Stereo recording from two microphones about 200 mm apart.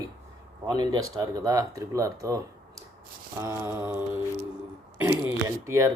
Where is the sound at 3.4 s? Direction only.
10° right (ahead or behind).